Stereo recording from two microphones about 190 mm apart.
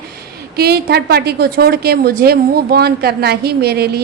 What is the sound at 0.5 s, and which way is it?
A woman's voice, 55° right (ahead or behind).